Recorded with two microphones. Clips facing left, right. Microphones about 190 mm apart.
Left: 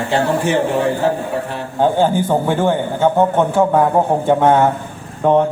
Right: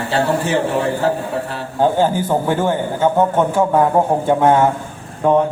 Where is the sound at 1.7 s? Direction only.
10° right (ahead or behind).